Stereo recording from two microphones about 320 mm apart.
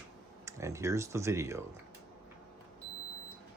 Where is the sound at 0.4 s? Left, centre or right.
Centre.